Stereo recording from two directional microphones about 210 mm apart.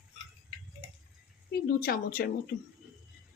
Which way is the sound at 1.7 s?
45° left (ahead or behind).